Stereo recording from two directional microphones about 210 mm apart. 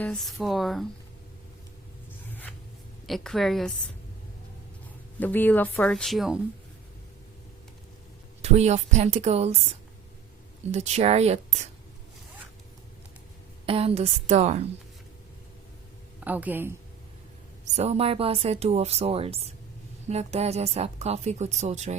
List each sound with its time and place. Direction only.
0.0 s speech: centre (ahead or behind)
2.3 s zipper: 5° left (ahead or behind)
3.1 s speech: centre (ahead or behind)
5.2 s speech: 10° left (ahead or behind)
8.4 s speech: 30° right (ahead or behind)
10.7 s speech: 30° right (ahead or behind)
13.7 s speech: 25° right (ahead or behind)
16.2 s speech: 10° right (ahead or behind)
17.7 s speech: 30° right (ahead or behind)